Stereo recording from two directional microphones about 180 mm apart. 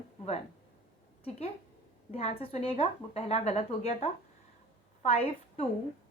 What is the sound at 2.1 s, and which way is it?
A woman's voice, 35° left (ahead or behind).